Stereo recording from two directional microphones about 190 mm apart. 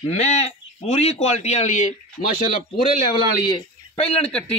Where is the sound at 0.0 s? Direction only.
35° left (ahead or behind).